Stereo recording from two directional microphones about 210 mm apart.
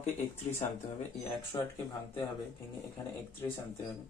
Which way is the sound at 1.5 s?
20° left (ahead or behind).